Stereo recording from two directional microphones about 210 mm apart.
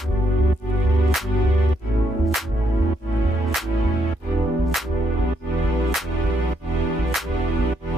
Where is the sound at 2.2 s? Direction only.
Centre (ahead or behind).